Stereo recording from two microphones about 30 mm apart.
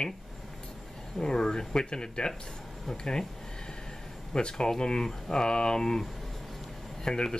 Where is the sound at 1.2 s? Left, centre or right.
Left.